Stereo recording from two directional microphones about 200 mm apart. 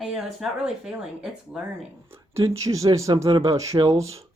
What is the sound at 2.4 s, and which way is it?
A man's voice, 15° right (ahead or behind).